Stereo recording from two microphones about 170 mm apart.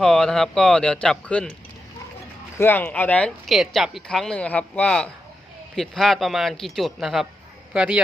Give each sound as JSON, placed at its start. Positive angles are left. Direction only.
{"t": 0.0, "sound": "speech", "side_deg": 5}
{"t": 2.6, "sound": "speech", "side_deg": 10}